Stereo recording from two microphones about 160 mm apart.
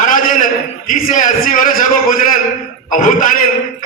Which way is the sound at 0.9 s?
55° left (ahead or behind).